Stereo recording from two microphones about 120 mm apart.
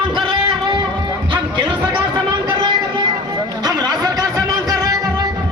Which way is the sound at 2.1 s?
35° right (ahead or behind).